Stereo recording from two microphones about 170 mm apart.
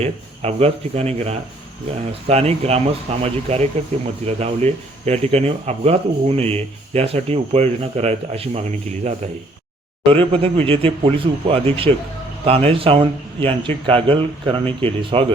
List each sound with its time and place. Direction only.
0.0 s speech: 35° right (ahead or behind)
10.1 s speech: 35° right (ahead or behind)